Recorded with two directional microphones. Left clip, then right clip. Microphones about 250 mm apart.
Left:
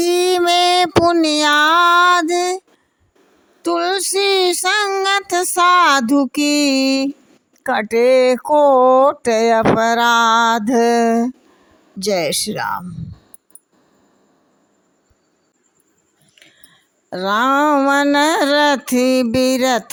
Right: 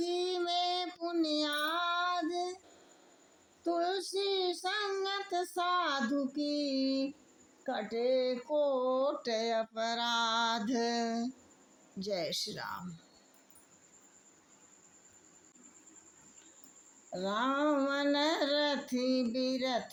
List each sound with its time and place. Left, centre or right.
0.0 s a sound: left
3.6 s speech: left
17.1 s speech: left